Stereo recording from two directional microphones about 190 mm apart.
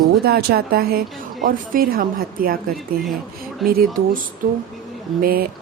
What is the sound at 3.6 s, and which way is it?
Speech, centre (ahead or behind).